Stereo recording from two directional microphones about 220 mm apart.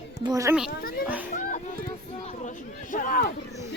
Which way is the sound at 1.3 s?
35° left (ahead or behind).